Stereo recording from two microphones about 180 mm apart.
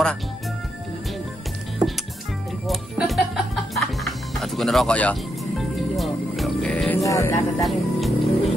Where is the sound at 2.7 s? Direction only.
Centre (ahead or behind).